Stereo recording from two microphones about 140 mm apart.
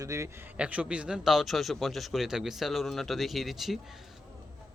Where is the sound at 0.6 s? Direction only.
10° right (ahead or behind).